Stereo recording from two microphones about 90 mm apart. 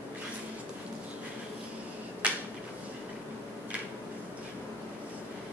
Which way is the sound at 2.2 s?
15° right (ahead or behind).